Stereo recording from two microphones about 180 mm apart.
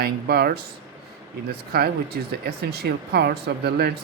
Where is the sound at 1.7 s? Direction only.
60° right (ahead or behind).